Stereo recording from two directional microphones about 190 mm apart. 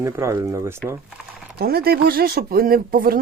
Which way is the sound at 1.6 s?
55° right (ahead or behind).